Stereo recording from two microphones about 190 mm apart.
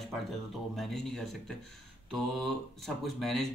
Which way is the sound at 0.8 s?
Centre (ahead or behind).